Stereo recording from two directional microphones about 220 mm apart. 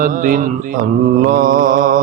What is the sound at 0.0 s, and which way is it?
Mantra, 35° right (ahead or behind).